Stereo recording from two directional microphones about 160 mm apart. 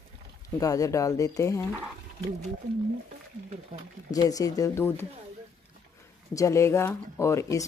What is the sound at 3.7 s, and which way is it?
Speech, 50° right (ahead or behind).